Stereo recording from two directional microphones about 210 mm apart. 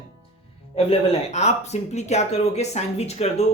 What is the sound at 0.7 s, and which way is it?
Speech, 30° left (ahead or behind).